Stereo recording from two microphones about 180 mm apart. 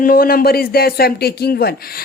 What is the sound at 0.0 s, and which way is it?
A woman's voice, 55° left (ahead or behind).